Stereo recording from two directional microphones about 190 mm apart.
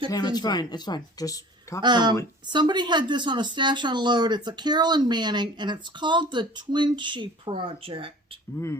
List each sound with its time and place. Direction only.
0.1 s speech: 20° left (ahead or behind)
1.8 s speech: 25° right (ahead or behind)